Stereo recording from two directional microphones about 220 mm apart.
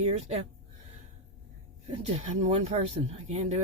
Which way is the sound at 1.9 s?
30° right (ahead or behind).